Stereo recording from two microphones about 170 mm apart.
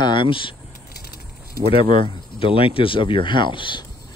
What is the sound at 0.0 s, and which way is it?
Speech, 30° left (ahead or behind).